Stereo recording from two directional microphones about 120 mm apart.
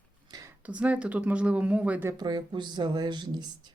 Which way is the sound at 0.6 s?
10° right (ahead or behind).